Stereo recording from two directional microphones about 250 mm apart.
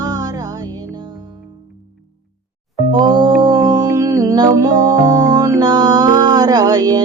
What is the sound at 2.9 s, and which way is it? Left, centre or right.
Music, centre.